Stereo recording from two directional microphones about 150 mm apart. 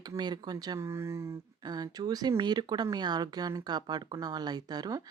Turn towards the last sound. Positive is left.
turn(degrees=-25)  # may be behind; listen again after turning